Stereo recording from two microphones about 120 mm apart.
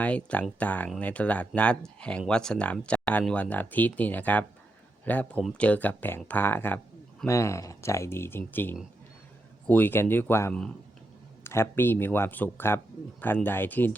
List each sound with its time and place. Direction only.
0.0 s speech: 10° left (ahead or behind)